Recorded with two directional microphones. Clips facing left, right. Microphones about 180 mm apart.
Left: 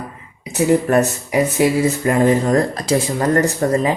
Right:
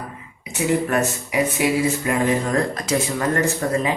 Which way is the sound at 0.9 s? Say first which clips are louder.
Left 6 dB; 35° left (ahead or behind).